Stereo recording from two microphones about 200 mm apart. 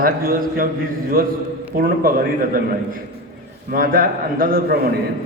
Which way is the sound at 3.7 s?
45° right (ahead or behind).